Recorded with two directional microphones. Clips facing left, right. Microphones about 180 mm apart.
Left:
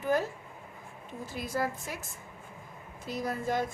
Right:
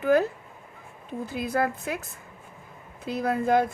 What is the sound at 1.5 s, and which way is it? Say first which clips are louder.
Speech: right 6 dB; 60° right (ahead or behind).